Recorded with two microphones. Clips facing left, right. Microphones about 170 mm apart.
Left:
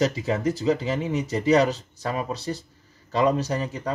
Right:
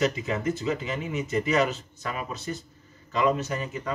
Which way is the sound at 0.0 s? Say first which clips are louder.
Left 3 dB; 35° left (ahead or behind).